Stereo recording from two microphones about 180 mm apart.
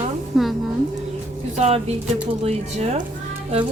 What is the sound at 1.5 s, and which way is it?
Speech, 35° right (ahead or behind).